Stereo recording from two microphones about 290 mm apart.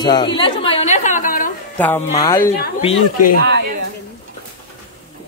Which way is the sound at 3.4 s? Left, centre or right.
Right.